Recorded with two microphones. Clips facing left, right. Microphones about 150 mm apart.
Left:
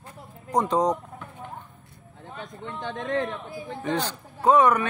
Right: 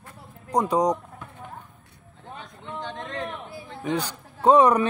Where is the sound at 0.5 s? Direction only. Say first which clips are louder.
Right 1 dB; 10° right (ahead or behind).